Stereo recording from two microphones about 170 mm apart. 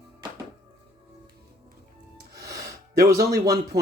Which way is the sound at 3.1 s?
65° right (ahead or behind).